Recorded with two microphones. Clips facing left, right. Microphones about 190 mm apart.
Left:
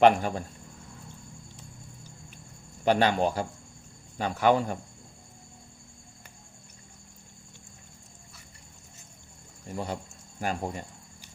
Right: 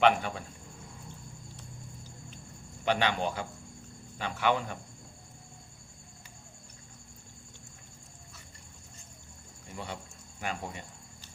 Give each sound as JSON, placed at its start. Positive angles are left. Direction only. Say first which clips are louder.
{"t": 0.0, "sound": "speech", "louder": "left 5 dB", "side_deg": 40}
{"t": 2.8, "sound": "speech", "louder": "left 5 dB", "side_deg": 40}
{"t": 9.7, "sound": "speech", "louder": "left 7 dB", "side_deg": 40}